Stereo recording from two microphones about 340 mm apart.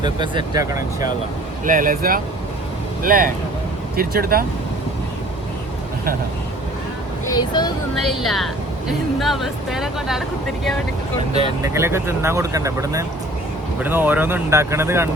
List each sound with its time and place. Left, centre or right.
0.0 s speech: centre
1.6 s speech: right
7.3 s speech: centre
8.0 s speech: centre
11.3 s speech: centre